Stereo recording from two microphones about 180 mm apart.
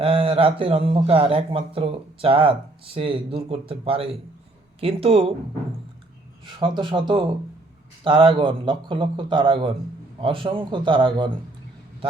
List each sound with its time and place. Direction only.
0.0 s a man's voice: 30° right (ahead or behind)
6.4 s a man's voice: 25° right (ahead or behind)